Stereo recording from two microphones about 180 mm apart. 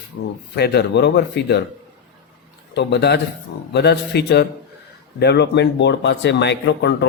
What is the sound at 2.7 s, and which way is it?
Speech, 65° left (ahead or behind).